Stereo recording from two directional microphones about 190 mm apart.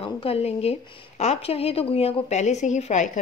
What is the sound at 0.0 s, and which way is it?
A woman's voice, 30° left (ahead or behind).